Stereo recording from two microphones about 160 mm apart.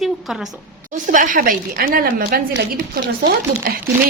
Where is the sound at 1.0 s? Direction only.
55° right (ahead or behind).